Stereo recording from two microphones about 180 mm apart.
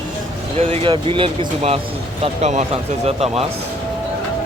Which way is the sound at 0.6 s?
35° right (ahead or behind).